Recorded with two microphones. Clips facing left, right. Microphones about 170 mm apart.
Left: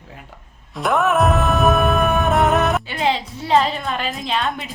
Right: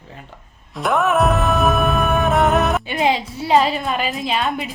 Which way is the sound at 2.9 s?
15° right (ahead or behind).